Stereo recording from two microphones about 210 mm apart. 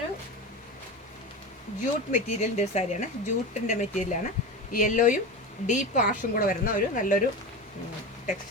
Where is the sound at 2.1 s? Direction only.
35° left (ahead or behind).